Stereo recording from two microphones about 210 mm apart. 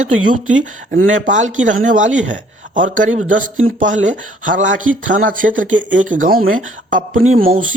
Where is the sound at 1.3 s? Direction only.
35° right (ahead or behind).